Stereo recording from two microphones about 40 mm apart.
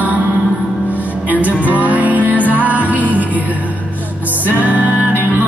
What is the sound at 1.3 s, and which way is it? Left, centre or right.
Music, right.